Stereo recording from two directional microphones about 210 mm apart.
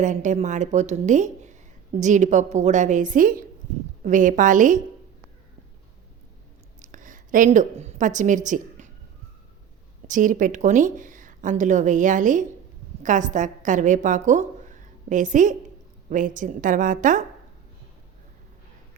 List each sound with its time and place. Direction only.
0.0 s speech: 35° right (ahead or behind)
6.8 s a woman's voice: 35° right (ahead or behind)
10.1 s a woman's voice: 40° right (ahead or behind)